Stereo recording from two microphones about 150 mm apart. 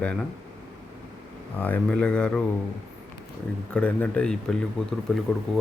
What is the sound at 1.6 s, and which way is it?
Speech, 10° left (ahead or behind).